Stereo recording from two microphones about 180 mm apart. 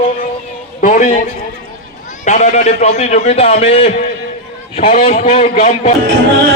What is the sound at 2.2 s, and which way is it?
A man's voice, 40° left (ahead or behind).